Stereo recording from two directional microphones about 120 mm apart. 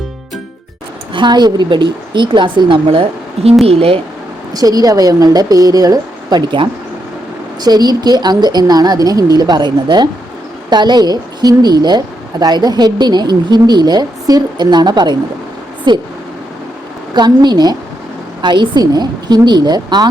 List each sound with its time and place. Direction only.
1.1 s a woman's voice: 40° right (ahead or behind); by 4.0 s 55° right (ahead or behind)
4.5 s a woman's voice: 30° right (ahead or behind)
17.2 s a woman's voice: 35° right (ahead or behind)